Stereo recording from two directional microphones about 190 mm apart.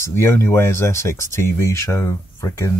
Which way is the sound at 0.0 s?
15° left (ahead or behind).